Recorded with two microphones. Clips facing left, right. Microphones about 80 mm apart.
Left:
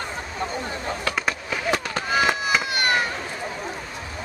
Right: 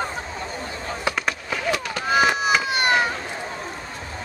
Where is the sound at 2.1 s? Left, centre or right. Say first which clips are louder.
Right 3 dB; right.